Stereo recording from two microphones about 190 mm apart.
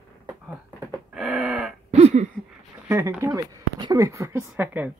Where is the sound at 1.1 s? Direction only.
Centre (ahead or behind).